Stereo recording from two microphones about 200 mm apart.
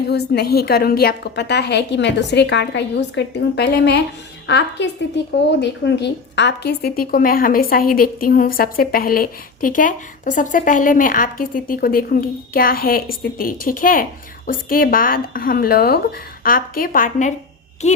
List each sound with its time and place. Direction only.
0.1 s a woman's voice: 55° left (ahead or behind); by 18.0 s 35° left (ahead or behind)